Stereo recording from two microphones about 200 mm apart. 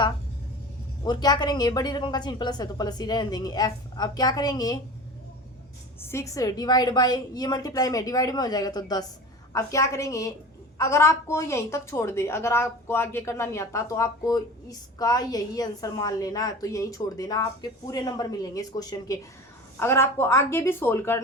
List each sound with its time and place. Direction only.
1.0 s a woman's voice: 20° left (ahead or behind)
6.0 s a woman's voice: 15° left (ahead or behind)